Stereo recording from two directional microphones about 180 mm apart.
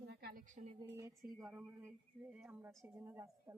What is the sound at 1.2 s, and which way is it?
A woman's voice, 5° right (ahead or behind).